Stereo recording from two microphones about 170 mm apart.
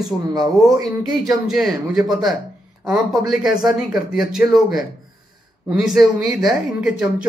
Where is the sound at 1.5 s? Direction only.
Centre (ahead or behind).